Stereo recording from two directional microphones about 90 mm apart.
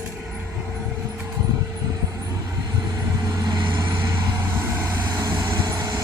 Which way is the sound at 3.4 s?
55° right (ahead or behind).